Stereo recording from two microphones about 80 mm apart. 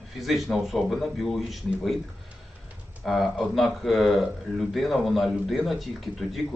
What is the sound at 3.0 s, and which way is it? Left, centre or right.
Speech, centre.